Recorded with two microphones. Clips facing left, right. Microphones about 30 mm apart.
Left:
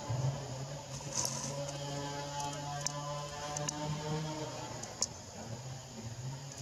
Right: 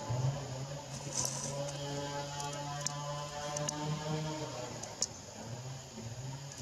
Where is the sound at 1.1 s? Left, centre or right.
Left.